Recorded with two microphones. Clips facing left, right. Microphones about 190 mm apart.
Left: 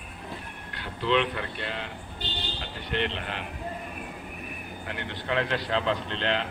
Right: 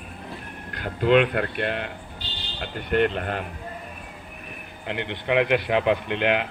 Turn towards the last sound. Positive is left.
turn(degrees=-15)  # may be behind; listen again after turning